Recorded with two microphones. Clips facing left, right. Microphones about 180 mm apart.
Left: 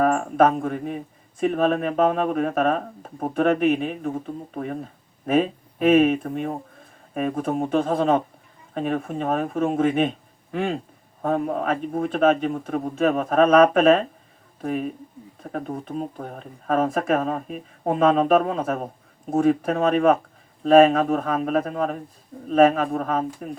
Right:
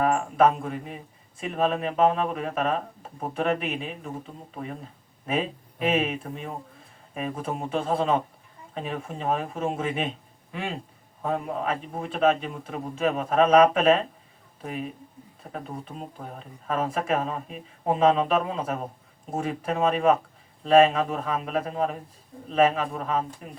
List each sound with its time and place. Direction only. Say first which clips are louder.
0.0 s speech: left 3 dB; 50° left (ahead or behind)